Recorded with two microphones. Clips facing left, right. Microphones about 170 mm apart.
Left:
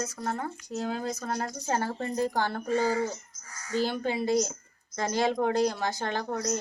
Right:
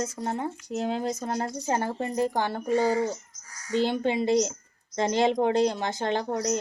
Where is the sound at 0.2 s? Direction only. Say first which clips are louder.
Right 3 dB; 20° right (ahead or behind).